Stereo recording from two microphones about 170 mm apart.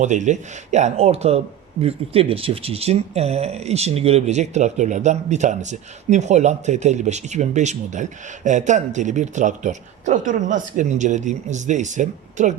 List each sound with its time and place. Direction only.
0.0 s speech: 45° right (ahead or behind)